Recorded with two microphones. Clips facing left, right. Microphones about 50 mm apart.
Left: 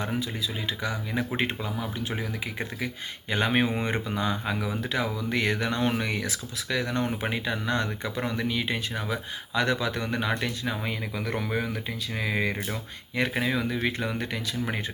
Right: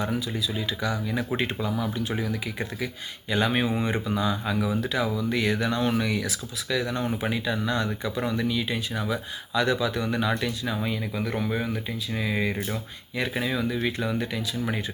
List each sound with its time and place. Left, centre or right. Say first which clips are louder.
0.0 s speech: right 2 dB; left
11.1 s speech: right 1 dB; left